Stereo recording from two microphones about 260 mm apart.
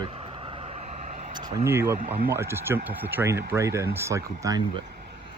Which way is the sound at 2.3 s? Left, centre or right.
Centre.